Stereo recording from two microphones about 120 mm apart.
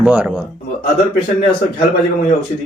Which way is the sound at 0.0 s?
10° right (ahead or behind).